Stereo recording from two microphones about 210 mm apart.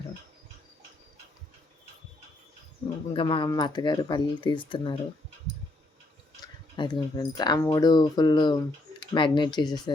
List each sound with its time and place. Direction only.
3.1 s speech: 25° left (ahead or behind)
6.4 s speech: 20° left (ahead or behind)